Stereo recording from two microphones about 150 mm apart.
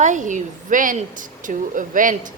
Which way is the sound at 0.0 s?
55° right (ahead or behind).